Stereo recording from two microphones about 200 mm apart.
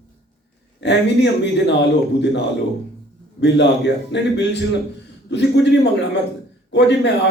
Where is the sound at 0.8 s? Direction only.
60° left (ahead or behind).